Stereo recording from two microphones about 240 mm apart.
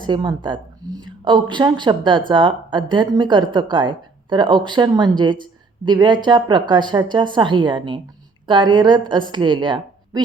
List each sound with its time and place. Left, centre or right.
0.0 s a woman's voice: centre